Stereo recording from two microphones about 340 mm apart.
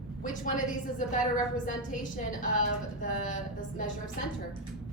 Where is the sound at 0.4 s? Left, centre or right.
Left.